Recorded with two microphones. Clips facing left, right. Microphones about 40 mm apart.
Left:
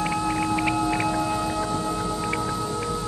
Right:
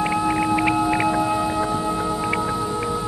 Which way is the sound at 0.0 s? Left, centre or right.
Centre.